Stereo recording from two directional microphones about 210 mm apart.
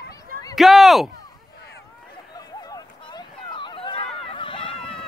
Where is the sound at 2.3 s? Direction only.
20° left (ahead or behind).